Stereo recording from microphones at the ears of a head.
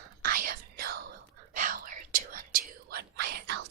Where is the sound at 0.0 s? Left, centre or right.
Right.